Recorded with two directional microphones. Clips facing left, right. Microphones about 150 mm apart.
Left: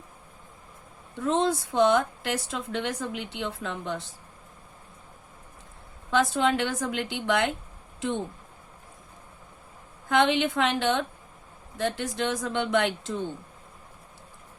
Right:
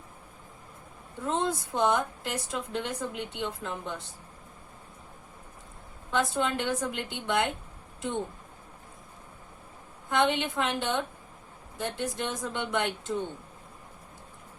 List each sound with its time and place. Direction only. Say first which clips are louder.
1.2 s a woman's voice: left 5 dB; 90° left
6.1 s a woman's voice: left 4 dB; 90° left
10.1 s a woman's voice: left 4 dB; 90° left